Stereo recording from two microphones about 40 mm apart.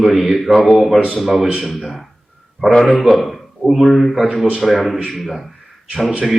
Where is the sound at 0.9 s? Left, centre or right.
Right.